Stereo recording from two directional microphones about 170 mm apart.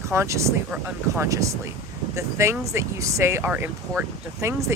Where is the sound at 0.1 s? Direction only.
15° right (ahead or behind).